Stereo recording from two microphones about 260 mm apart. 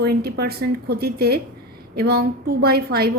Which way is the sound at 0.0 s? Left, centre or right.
Right.